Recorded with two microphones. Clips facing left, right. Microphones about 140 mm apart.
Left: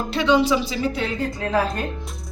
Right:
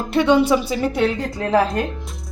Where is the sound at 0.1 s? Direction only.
55° right (ahead or behind).